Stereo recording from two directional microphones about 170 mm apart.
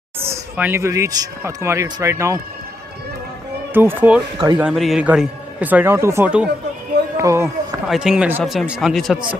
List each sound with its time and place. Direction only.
0.3 s speech: 15° right (ahead or behind)
3.7 s speech: 10° right (ahead or behind)
7.4 s speech: 5° right (ahead or behind)